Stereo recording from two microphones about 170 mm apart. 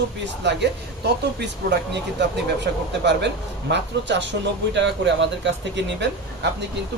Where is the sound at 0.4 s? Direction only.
85° right.